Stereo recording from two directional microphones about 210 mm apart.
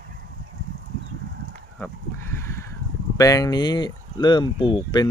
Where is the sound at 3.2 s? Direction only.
15° left (ahead or behind).